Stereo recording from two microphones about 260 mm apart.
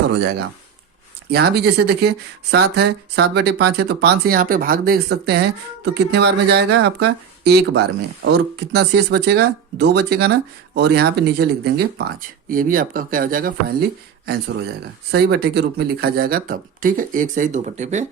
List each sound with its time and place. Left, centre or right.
1.3 s speech: right
15.1 s speech: right